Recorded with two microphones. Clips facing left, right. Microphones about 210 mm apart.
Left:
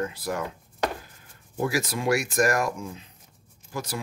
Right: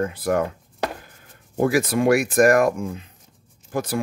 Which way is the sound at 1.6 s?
55° right (ahead or behind).